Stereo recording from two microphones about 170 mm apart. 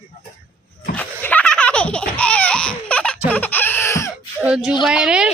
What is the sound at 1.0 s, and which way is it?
Laughter, 10° left (ahead or behind).